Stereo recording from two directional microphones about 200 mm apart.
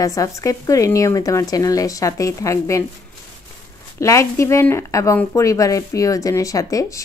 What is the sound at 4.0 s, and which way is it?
A woman's voice, 15° left (ahead or behind).